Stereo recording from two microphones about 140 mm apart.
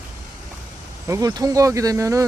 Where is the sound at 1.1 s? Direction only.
25° right (ahead or behind).